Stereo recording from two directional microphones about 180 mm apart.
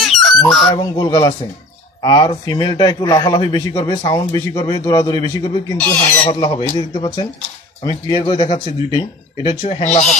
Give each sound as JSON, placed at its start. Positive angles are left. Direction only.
{"t": 0.0, "sound": "goose", "side_deg": 0}
{"t": 0.7, "sound": "a man's voice", "side_deg": 20}
{"t": 5.8, "sound": "speech", "side_deg": 10}
{"t": 6.2, "sound": "a man's voice", "side_deg": 25}
{"t": 9.6, "sound": "speech", "side_deg": 40}